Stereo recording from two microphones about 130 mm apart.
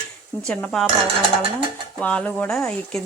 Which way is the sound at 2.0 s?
10° left (ahead or behind).